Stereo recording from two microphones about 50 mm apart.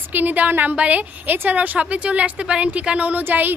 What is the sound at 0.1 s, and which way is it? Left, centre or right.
A woman's voice, right.